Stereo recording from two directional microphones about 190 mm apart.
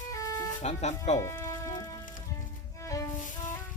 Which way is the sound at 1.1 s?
15° left (ahead or behind).